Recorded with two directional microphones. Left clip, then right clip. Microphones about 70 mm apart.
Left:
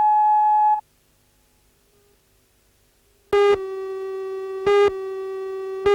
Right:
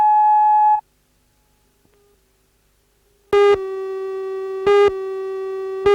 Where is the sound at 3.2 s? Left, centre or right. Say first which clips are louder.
Right 3 dB; centre.